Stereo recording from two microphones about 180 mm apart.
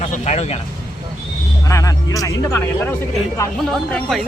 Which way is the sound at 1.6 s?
20° left (ahead or behind).